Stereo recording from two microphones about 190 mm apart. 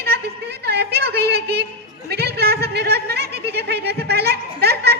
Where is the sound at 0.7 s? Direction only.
60° right (ahead or behind).